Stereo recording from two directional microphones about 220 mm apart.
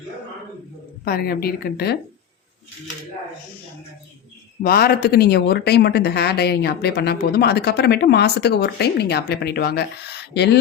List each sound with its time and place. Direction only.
1.0 s speech: 45° left (ahead or behind)
4.6 s speech: 45° left (ahead or behind)